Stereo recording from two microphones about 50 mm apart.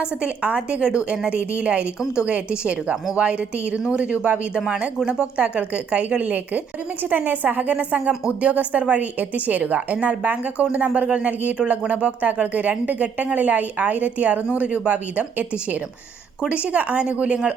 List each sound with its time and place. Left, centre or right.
0.0 s a woman's voice: right